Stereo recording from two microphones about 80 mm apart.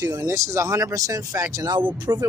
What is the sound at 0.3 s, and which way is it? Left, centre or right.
Speech, right.